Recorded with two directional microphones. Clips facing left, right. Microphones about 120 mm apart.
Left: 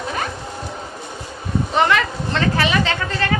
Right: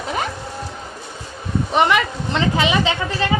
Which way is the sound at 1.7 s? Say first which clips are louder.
Right 1 dB; 15° right (ahead or behind).